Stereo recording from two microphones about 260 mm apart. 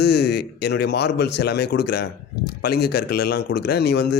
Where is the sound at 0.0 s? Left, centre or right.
Left.